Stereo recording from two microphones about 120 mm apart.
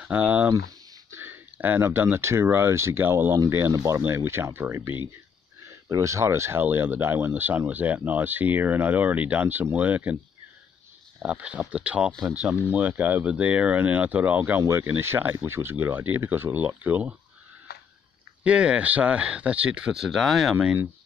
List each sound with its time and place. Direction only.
0.0 s speech: 15° right (ahead or behind)
11.2 s speech: 10° right (ahead or behind)
18.4 s speech: 10° right (ahead or behind)